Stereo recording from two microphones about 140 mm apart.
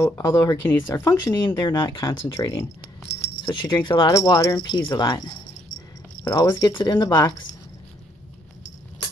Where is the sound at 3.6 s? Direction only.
30° left (ahead or behind).